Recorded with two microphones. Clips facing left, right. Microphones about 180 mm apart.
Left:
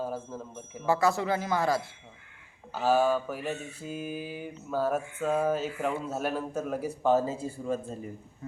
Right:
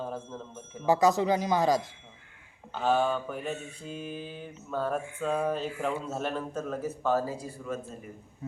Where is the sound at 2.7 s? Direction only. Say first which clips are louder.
Left 2 dB; 5° left (ahead or behind); by 8.0 s 30° left (ahead or behind).